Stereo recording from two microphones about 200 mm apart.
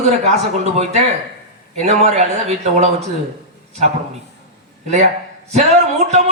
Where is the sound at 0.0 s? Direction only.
35° right (ahead or behind).